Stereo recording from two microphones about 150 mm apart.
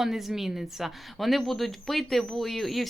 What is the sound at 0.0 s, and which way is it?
A woman's voice, centre (ahead or behind).